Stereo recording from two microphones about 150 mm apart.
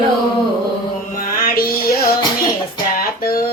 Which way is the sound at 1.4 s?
80° left.